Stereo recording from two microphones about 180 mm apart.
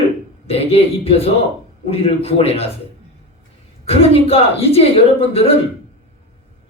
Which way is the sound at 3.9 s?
35° left (ahead or behind).